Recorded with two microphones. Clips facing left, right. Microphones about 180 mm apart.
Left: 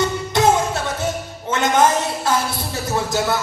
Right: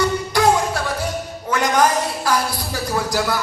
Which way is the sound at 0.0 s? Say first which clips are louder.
Even; 25° left (ahead or behind).